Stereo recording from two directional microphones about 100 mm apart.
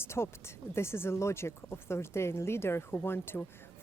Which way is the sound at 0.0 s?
25° left (ahead or behind).